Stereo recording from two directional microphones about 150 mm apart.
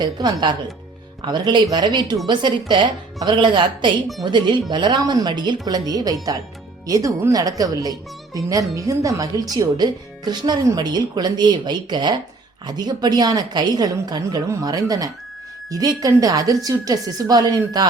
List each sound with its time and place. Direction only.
0.0 s speech: 25° right (ahead or behind)